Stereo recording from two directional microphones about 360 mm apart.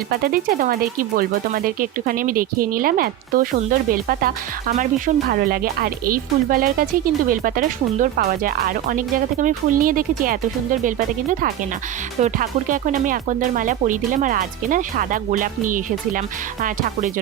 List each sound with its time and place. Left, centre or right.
0.1 s speech: right